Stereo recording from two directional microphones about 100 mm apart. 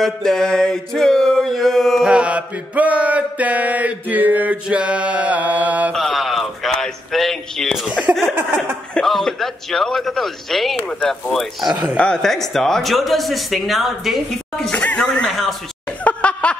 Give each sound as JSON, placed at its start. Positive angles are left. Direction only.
{"t": 0.0, "sound": "speech", "side_deg": 5}
{"t": 2.0, "sound": "mantra", "side_deg": -10}
{"t": 5.9, "sound": "a sound", "side_deg": 0}
{"t": 7.9, "sound": "mantra", "side_deg": -10}
{"t": 8.4, "sound": "speech", "side_deg": -20}
{"t": 8.9, "sound": "speech", "side_deg": 5}
{"t": 11.7, "sound": "mantra", "side_deg": -15}
{"t": 12.0, "sound": "speech", "side_deg": 5}
{"t": 14.7, "sound": "speech", "side_deg": 10}
{"t": 16.0, "sound": "chuckle", "side_deg": 15}